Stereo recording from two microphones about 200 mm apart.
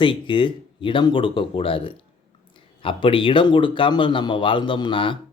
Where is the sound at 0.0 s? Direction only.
25° left (ahead or behind).